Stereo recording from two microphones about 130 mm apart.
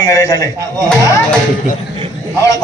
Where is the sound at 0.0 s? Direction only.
25° left (ahead or behind).